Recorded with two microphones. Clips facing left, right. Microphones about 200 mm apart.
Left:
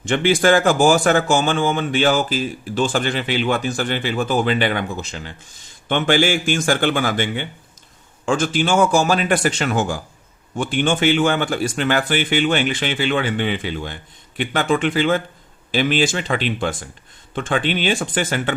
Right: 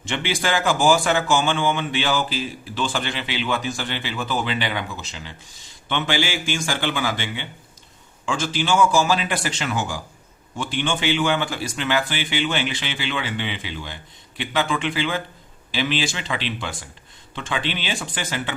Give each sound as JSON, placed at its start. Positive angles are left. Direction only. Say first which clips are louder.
{"t": 0.1, "sound": "speech", "louder": "left 9 dB", "side_deg": 50}